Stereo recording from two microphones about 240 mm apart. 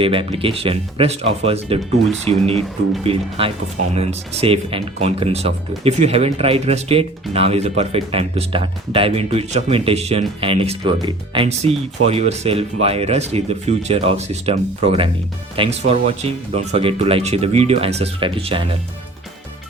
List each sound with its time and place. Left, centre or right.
0.0 s speech: right